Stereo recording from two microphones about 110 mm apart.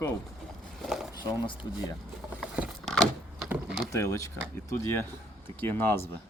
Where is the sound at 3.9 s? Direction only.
25° left (ahead or behind).